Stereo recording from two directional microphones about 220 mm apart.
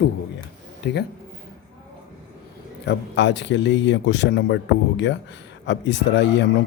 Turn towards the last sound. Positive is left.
turn(degrees=55)  # may be behind; listen again after turning